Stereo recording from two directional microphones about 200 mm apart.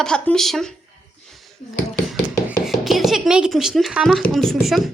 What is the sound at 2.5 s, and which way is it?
Speech, centre (ahead or behind).